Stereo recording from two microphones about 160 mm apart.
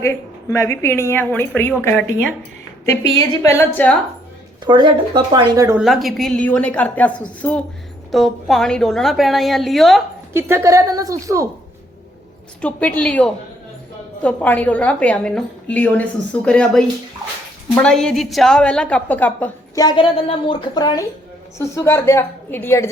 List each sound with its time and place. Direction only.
0.0 s a woman's voice: 15° left (ahead or behind)
4.6 s speech: 30° right (ahead or behind)
5.8 s a woman's voice: centre (ahead or behind)
10.3 s speech: 15° right (ahead or behind)
12.6 s a woman's voice: 10° left (ahead or behind)
19.8 s a woman's voice: 30° left (ahead or behind); by 22.9 s 15° left (ahead or behind)